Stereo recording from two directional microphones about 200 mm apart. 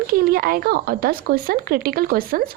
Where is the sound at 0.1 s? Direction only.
45° right (ahead or behind).